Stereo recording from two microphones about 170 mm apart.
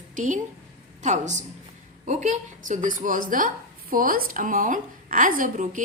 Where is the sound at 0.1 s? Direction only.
50° right (ahead or behind).